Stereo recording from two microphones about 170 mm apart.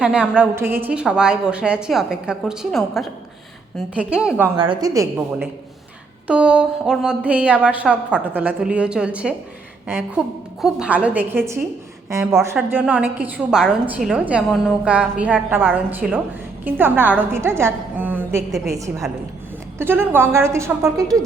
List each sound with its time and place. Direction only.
0.0 s a woman's voice: 5° right (ahead or behind)
4.7 s a woman's voice: 20° right (ahead or behind)
10.6 s a woman's voice: 5° right (ahead or behind)
19.8 s a woman's voice: 15° right (ahead or behind)